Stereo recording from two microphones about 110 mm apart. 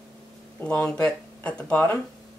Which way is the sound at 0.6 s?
10° left (ahead or behind).